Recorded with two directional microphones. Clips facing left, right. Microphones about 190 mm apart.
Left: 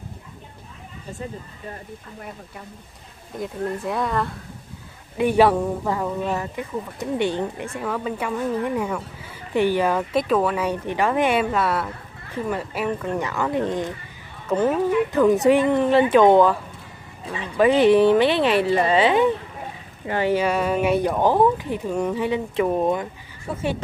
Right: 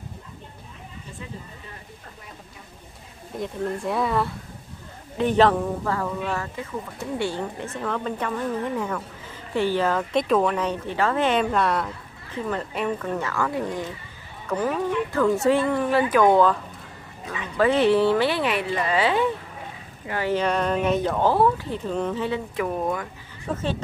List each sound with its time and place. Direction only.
3.3 s speech: centre (ahead or behind)
5.1 s speech: 10° left (ahead or behind)
13.2 s speech: 20° left (ahead or behind)
14.7 s speech: 5° left (ahead or behind)
15.1 s speech: 15° left (ahead or behind)
17.6 s speech: 15° left (ahead or behind); by 18.9 s 35° left (ahead or behind)
18.9 s speech: 20° left (ahead or behind)
20.3 s speech: 5° left (ahead or behind); by 23.0 s 25° left (ahead or behind)
23.5 s speech: 10° left (ahead or behind)